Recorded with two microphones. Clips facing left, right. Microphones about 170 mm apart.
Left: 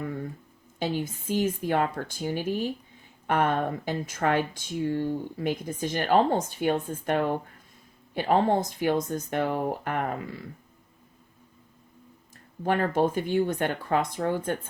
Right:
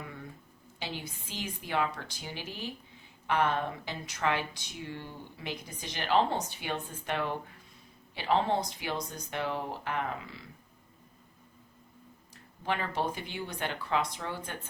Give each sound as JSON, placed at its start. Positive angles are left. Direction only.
{"t": 0.8, "sound": "speech", "side_deg": 45}
{"t": 12.6, "sound": "speech", "side_deg": 50}